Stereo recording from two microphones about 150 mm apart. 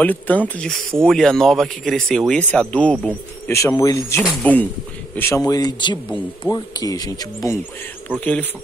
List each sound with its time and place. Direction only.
0.0 s speech: 10° left (ahead or behind)
3.4 s speech: 20° left (ahead or behind)
4.2 s speech: centre (ahead or behind)
5.1 s speech: 15° left (ahead or behind)
5.4 s speech: 25° left (ahead or behind)
8.2 s speech: 10° left (ahead or behind)